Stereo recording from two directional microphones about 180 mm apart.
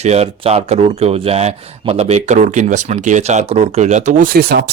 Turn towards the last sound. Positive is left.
turn(degrees=-60)  # may be behind; listen again after turning